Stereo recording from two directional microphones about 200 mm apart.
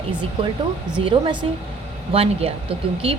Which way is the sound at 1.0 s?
25° right (ahead or behind).